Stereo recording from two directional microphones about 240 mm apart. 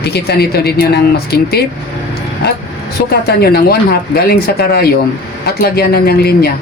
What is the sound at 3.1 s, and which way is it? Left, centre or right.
Speech, left.